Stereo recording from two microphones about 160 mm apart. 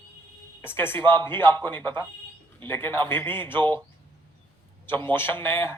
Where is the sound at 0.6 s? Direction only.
15° left (ahead or behind).